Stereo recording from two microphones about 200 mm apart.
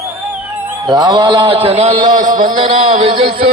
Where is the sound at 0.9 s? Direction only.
20° right (ahead or behind).